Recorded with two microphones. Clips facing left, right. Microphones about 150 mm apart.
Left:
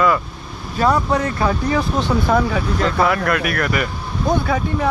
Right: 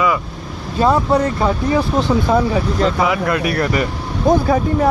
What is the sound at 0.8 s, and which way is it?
Speech, 25° right (ahead or behind).